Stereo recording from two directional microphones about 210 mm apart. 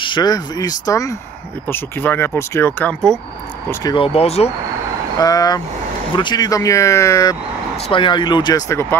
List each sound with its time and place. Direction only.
0.0 s speech: 20° left (ahead or behind); by 3.2 s 5° left (ahead or behind)
3.8 s speech: 25° left (ahead or behind)
5.2 s speech: 15° left (ahead or behind)